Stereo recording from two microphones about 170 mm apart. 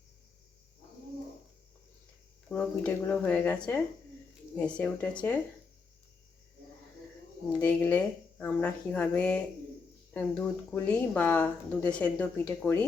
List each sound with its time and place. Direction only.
2.5 s speech: 10° left (ahead or behind)
7.6 s speech: 10° left (ahead or behind)